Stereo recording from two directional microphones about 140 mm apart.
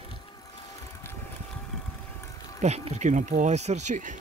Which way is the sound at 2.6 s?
50° right (ahead or behind).